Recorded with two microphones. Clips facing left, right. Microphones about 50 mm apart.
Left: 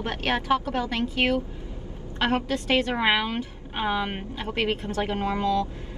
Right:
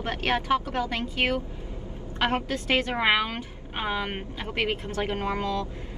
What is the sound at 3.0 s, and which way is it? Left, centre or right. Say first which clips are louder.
Speech: even; centre.